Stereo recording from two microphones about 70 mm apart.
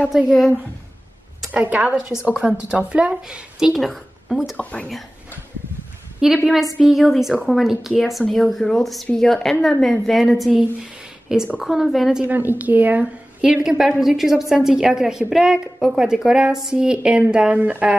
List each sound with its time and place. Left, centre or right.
1.5 s a woman's voice: right; by 4.4 s centre
4.6 s speech: centre
6.2 s a woman's voice: centre
12.3 s a woman's voice: right
13.4 s a woman's voice: centre